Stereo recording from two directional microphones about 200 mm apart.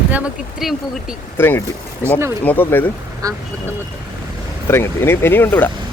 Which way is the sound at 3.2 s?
15° right (ahead or behind).